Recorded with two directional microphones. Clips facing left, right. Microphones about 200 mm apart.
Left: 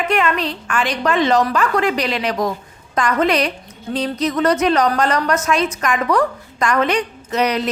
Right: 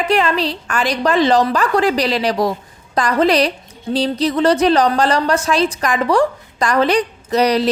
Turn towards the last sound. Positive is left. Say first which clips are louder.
# right 4 dB
turn(degrees=-35)  # may be behind; listen again after turning